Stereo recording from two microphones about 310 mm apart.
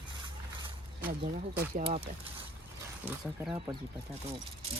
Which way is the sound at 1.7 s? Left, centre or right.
Right.